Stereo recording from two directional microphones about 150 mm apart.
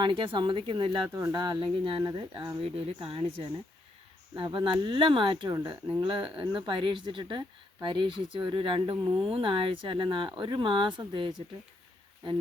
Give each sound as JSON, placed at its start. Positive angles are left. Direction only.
{"t": 0.0, "sound": "speech", "side_deg": -35}
{"t": 2.6, "sound": "speech", "side_deg": -40}